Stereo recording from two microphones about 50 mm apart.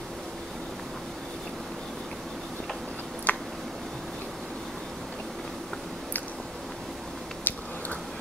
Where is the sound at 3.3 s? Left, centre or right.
Left.